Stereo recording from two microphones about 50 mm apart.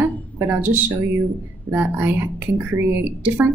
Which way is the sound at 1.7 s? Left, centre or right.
Right.